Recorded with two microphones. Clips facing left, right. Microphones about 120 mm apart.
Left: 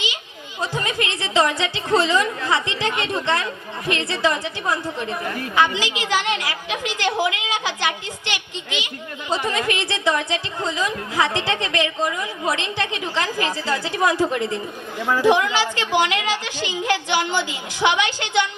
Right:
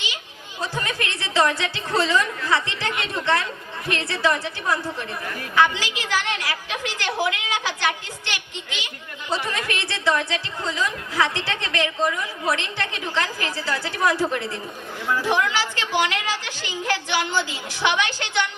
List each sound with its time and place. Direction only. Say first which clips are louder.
0.6 s a woman's voice: left 3 dB; 15° left (ahead or behind)